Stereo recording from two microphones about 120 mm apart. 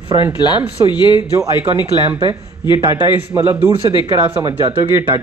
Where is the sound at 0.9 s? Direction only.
40° left (ahead or behind).